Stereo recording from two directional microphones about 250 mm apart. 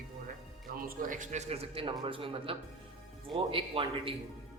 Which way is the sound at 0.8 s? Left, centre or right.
Right.